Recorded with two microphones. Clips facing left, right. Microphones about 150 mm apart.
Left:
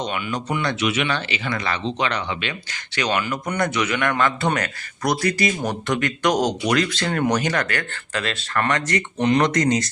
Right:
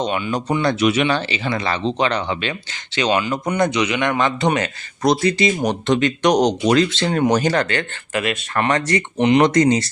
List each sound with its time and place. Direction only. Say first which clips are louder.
0.0 s speech: right 5 dB; 35° right (ahead or behind)